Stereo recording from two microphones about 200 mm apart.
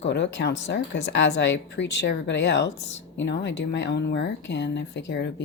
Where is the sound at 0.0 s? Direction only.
60° left (ahead or behind).